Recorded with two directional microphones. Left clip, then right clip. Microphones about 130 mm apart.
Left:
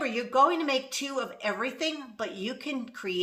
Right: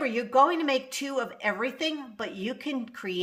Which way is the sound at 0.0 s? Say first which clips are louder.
Right 1 dB; 50° right (ahead or behind).